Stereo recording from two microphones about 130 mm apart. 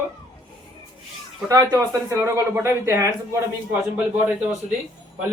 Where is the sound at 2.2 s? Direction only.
10° right (ahead or behind).